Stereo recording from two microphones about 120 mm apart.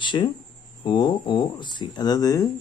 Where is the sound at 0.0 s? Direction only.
40° left (ahead or behind).